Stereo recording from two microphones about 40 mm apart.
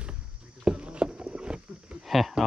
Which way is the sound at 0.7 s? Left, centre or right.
Right.